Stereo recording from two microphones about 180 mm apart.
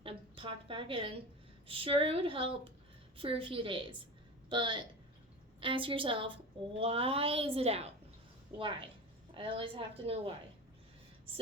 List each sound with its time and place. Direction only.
0.0 s a sound: 30° right (ahead or behind)
1.6 s a woman's voice: 30° right (ahead or behind)
9.3 s a woman's voice: 30° right (ahead or behind)